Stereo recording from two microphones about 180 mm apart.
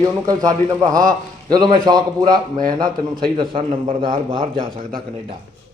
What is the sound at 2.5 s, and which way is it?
Speech, 50° right (ahead or behind).